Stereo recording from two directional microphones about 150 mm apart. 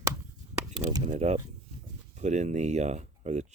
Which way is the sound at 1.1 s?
50° right (ahead or behind).